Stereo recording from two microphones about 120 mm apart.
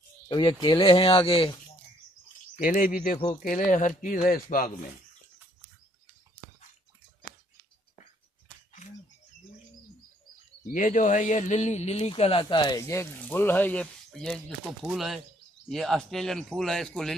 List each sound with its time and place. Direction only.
0.3 s speech: 45° left (ahead or behind)
2.5 s speech: 90° left
10.8 s speech: 90° left; by 12.7 s 40° left (ahead or behind)
12.7 s speech: 25° left (ahead or behind); by 17.1 s 5° left (ahead or behind)